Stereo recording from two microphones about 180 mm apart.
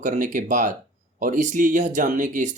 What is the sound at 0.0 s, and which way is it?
Speech, 45° right (ahead or behind).